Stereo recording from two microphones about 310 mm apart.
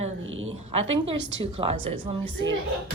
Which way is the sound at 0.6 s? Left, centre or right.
Centre.